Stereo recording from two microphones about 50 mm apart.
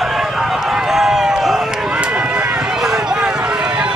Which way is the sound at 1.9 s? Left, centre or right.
Right.